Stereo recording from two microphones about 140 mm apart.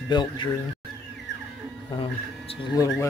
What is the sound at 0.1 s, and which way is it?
Speech, 30° left (ahead or behind).